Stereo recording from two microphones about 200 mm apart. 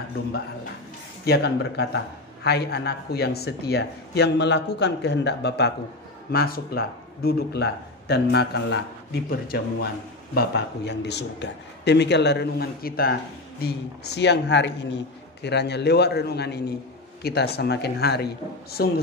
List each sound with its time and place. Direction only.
1.2 s speech: 55° left (ahead or behind)
14.1 s speech: 60° left (ahead or behind)